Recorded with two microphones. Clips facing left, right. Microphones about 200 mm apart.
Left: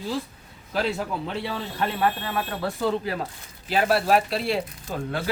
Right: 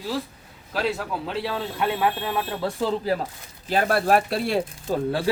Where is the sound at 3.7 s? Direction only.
50° right (ahead or behind).